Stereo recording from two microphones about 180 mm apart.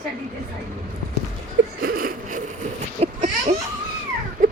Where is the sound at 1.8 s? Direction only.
50° right (ahead or behind).